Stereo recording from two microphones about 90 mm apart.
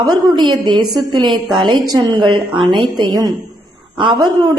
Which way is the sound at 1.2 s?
60° right (ahead or behind).